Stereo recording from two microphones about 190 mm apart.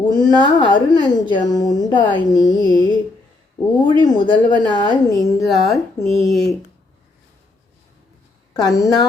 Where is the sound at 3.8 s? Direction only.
25° left (ahead or behind).